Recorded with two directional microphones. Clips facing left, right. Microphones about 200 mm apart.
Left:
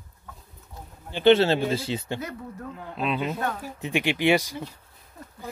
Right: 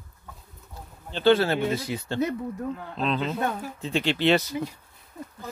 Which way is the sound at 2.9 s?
10° left (ahead or behind).